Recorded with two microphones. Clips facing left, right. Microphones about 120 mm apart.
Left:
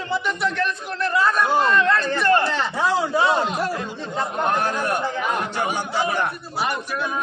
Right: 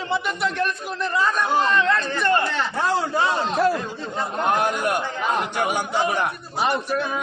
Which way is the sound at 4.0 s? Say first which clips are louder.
Left 4 dB; 15° right (ahead or behind).